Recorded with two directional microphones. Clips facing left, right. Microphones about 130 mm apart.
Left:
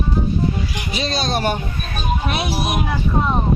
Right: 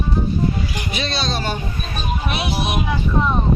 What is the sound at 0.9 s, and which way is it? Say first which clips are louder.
Speech: left 4 dB; 40° left (ahead or behind).